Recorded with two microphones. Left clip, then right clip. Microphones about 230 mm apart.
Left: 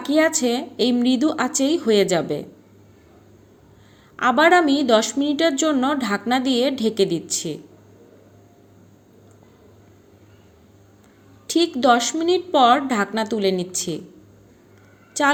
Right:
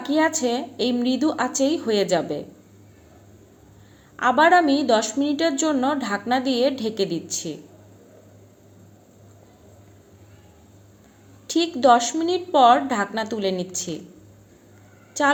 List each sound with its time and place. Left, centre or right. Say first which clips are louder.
0.0 s a woman's voice: left 2 dB; left
4.2 s a woman's voice: left 1 dB; left
11.4 s a woman's voice: even; left
15.2 s a woman's voice: left 1 dB; left